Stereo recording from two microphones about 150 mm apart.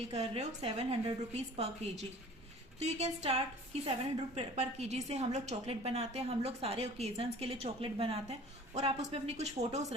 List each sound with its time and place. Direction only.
0.1 s a woman's voice: 45° right (ahead or behind)